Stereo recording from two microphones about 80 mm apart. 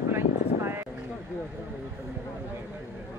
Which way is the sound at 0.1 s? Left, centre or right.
Right.